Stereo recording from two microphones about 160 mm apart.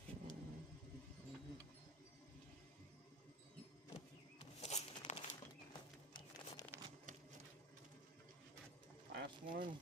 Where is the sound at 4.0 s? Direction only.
40° left (ahead or behind).